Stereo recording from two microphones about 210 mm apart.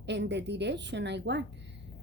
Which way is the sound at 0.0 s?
55° right (ahead or behind).